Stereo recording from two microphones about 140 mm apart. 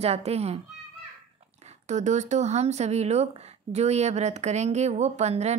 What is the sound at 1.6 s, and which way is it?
Speech, 55° right (ahead or behind).